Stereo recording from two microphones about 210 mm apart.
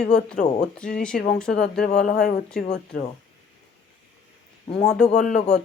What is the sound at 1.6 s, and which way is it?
Speech, 50° left (ahead or behind).